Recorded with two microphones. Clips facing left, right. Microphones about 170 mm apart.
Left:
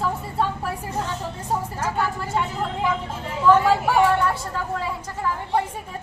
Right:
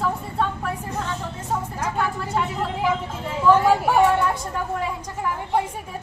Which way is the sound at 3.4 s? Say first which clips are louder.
Even; 10° right (ahead or behind).